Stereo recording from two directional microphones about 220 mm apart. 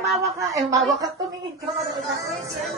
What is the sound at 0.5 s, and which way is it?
Speech, 15° right (ahead or behind).